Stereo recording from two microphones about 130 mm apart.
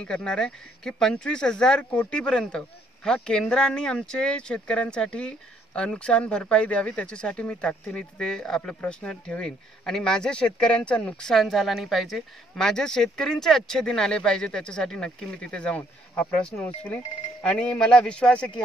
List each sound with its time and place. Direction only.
0.0 s speech: 5° left (ahead or behind)